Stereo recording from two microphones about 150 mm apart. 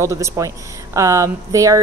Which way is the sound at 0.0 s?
20° right (ahead or behind).